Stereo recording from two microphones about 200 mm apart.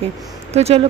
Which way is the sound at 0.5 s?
30° right (ahead or behind).